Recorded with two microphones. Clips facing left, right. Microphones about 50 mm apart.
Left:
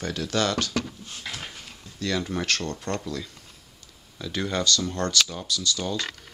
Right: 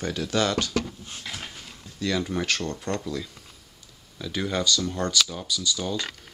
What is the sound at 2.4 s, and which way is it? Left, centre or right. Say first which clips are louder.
Speech: even; centre.